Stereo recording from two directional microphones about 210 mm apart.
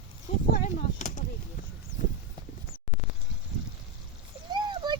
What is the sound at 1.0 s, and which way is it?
Speech, 35° left (ahead or behind).